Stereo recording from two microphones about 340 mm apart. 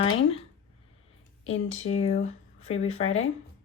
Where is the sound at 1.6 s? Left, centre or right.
Centre.